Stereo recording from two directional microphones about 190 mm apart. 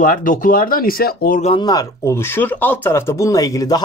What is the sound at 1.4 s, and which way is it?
Speech, 25° left (ahead or behind).